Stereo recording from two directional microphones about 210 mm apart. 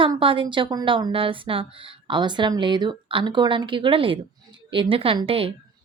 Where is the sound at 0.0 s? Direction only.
25° right (ahead or behind).